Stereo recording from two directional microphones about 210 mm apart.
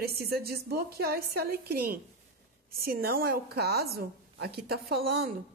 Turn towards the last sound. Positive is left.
turn(degrees=-50)  # may be behind; listen again after turning